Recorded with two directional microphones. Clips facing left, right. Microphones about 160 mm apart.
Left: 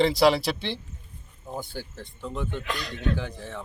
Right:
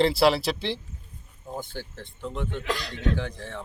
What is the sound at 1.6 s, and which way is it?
Speech, 10° left (ahead or behind).